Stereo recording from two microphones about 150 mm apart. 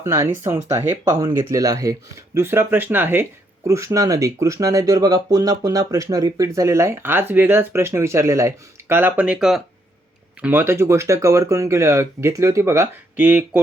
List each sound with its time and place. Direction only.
0.0 s speech: 20° right (ahead or behind)